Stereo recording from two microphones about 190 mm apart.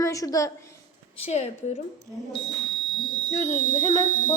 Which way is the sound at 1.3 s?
35° left (ahead or behind).